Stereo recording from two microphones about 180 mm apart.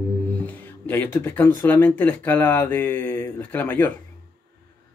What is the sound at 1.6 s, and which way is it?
Speech, 10° left (ahead or behind).